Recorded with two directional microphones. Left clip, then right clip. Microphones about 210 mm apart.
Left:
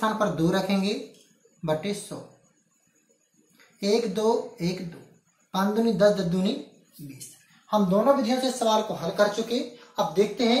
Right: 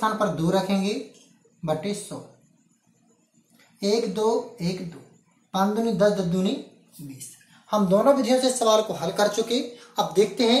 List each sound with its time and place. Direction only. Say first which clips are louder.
0.0 s speech: right 1 dB; 10° right (ahead or behind)
3.8 s speech: right 1 dB; 15° right (ahead or behind)
7.7 s speech: right 2 dB; 45° right (ahead or behind)